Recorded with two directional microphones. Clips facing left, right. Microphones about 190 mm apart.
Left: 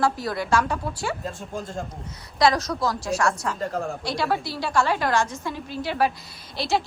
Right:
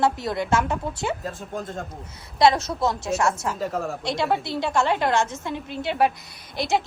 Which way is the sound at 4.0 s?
20° right (ahead or behind).